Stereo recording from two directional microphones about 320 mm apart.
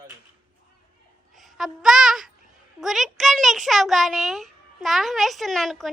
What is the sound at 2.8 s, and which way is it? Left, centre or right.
A child's voice, centre.